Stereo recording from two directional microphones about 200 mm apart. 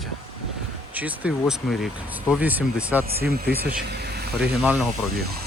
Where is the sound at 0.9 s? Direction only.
5° right (ahead or behind).